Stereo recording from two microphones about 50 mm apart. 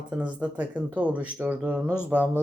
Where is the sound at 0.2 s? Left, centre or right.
Right.